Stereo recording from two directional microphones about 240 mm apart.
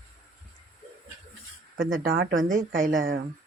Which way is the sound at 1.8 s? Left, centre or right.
Right.